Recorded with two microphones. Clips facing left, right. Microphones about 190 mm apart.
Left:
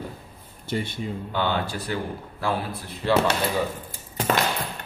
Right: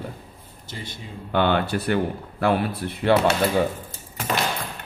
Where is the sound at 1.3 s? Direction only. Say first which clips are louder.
Right 7 dB; 60° right (ahead or behind).